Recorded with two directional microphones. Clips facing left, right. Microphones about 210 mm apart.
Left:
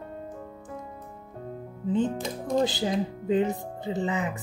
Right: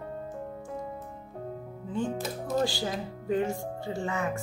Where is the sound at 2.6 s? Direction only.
20° left (ahead or behind).